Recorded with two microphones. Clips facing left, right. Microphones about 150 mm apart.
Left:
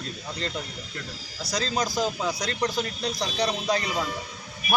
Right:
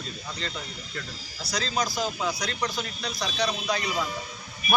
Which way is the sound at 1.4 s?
50° left (ahead or behind).